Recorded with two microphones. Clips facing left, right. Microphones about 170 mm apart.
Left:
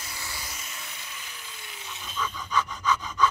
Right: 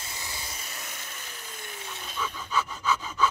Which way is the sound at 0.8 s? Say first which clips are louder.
Right 1 dB; 45° right (ahead or behind).